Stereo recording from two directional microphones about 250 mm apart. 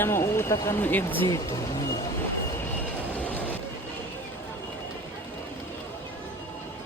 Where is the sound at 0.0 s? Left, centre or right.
Centre.